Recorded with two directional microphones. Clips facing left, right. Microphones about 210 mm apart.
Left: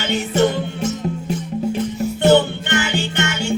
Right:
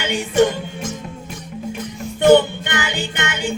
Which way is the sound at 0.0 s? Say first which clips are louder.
Right 1 dB; 15° right (ahead or behind).